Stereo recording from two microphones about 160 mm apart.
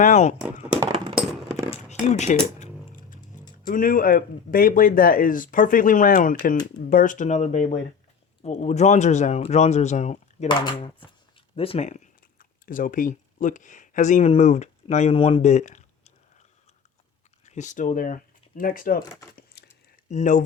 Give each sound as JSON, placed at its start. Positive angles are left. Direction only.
{"t": 0.0, "sound": "speech", "side_deg": 45}
{"t": 0.9, "sound": "a sound", "side_deg": -35}
{"t": 1.7, "sound": "a sound", "side_deg": 45}
{"t": 3.7, "sound": "speech", "side_deg": 60}
{"t": 10.5, "sound": "speech", "side_deg": 30}
{"t": 15.1, "sound": "speech", "side_deg": 35}
{"t": 17.4, "sound": "speech", "side_deg": 50}
{"t": 19.6, "sound": "a sound", "side_deg": 90}
{"t": 20.1, "sound": "speech", "side_deg": 50}